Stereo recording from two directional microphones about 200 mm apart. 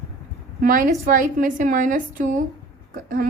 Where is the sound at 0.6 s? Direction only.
45° right (ahead or behind).